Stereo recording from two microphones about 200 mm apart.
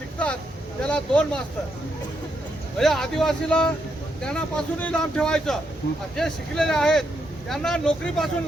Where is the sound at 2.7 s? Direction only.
Centre (ahead or behind).